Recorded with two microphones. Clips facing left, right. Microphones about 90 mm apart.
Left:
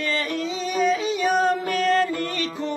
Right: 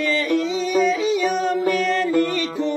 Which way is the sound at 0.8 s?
35° left (ahead or behind).